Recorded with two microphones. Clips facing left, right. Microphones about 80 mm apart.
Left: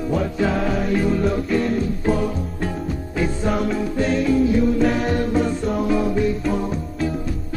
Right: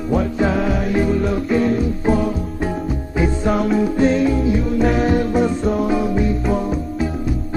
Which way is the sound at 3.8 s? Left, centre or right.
Centre.